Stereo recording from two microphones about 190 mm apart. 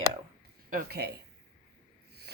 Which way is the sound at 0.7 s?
55° right (ahead or behind).